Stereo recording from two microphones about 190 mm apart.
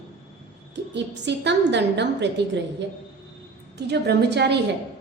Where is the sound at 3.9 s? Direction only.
60° right (ahead or behind).